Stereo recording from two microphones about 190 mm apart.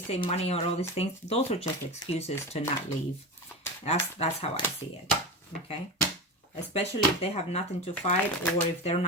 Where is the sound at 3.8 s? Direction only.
35° left (ahead or behind).